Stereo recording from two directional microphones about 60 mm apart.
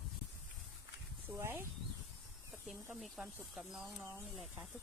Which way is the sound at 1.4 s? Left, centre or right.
Right.